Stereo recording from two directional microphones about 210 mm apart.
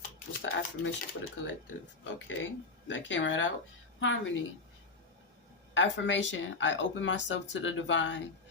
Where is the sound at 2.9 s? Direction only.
60° left (ahead or behind).